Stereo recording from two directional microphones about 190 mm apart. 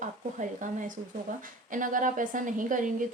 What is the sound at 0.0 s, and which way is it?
A woman's voice, 45° right (ahead or behind).